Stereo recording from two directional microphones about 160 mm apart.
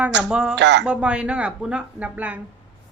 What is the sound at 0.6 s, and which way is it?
Speech, 90° right.